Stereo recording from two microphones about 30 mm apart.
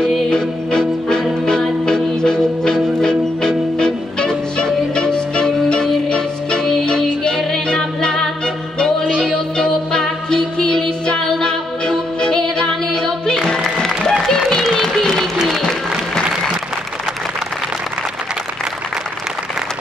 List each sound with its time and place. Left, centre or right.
0.3 s music: left
7.7 s music: centre
9.0 s music: right
9.9 s music: left
12.2 s music: left
14.3 s a sound: centre